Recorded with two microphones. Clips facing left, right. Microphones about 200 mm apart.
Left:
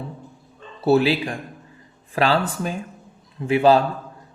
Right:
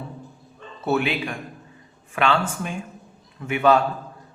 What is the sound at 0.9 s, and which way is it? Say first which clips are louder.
A man's voice: left 6 dB; 35° left (ahead or behind).